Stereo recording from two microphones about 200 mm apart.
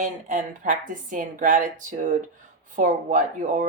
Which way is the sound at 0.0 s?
40° right (ahead or behind).